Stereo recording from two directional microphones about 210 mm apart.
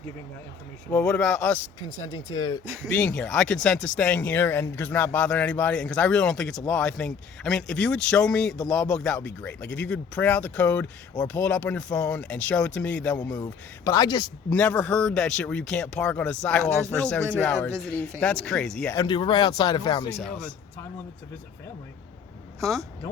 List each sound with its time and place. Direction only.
0.9 s speech: 10° left (ahead or behind)
2.1 s speech: 20° left (ahead or behind)
2.8 s speech: 5° left (ahead or behind)
13.1 s speech: 15° left (ahead or behind)
14.5 s speech: 5° left (ahead or behind)
18.9 s speech: 20° left (ahead or behind)
20.1 s speech: 5° left (ahead or behind)